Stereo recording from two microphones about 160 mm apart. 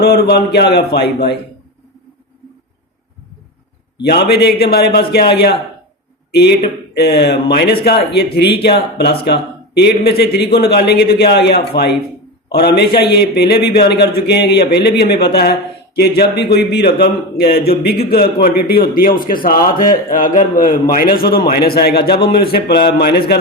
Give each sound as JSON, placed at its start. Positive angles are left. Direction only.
{"t": 0.0, "sound": "speech", "side_deg": 85}
{"t": 3.9, "sound": "a man's voice", "side_deg": 90}
{"t": 20.9, "sound": "a man's voice", "side_deg": 70}